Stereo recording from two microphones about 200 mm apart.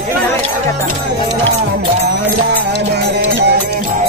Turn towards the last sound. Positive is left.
turn(degrees=-55)  # may be behind; listen again after turning